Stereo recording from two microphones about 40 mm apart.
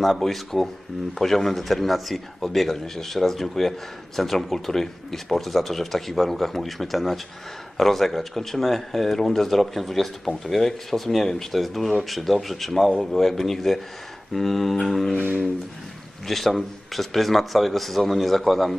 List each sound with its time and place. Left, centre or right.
0.2 s speech: centre
15.1 s a sound: right
16.3 s speech: centre